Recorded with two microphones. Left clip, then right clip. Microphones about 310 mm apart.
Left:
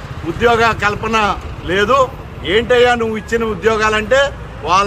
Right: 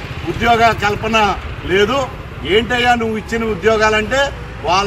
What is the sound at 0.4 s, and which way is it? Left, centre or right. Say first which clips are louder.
A man's voice: even; centre.